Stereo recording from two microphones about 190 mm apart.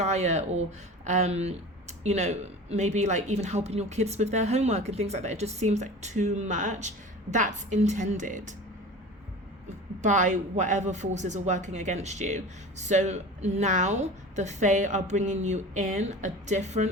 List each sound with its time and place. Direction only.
0.0 s speech: 35° right (ahead or behind)
9.6 s speech: 40° right (ahead or behind)